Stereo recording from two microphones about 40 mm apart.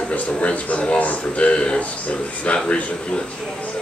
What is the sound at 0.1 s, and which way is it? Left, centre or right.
Speech, left.